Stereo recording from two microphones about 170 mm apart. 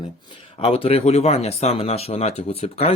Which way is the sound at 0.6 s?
35° left (ahead or behind).